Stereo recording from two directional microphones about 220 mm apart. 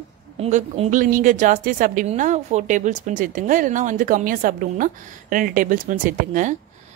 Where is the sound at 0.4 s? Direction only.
30° right (ahead or behind).